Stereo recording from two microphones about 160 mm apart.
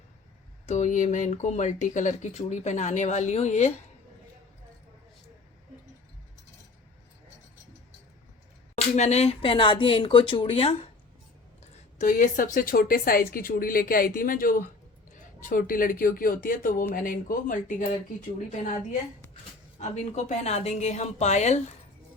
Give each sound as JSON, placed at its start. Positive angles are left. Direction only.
{"t": 0.7, "sound": "speech", "side_deg": 50}
{"t": 8.7, "sound": "speech", "side_deg": 45}
{"t": 11.6, "sound": "a woman's voice", "side_deg": 50}
{"t": 19.8, "sound": "speech", "side_deg": 45}